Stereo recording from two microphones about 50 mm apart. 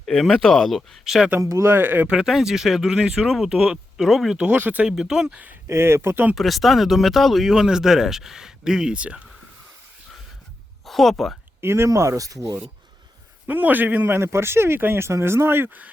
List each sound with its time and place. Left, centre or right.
0.0 s speech: centre
1.0 s speech: centre
1.6 s speech: right
2.2 s speech: centre
4.5 s a man's voice: right
4.9 s speech: centre
5.6 s speech: right
6.0 s speech: right
6.3 s speech: centre; by 9.2 s right
10.8 s speech: centre
11.6 s speech: right
13.5 s a man's voice: right
14.2 s speech: right
15.1 s speech: right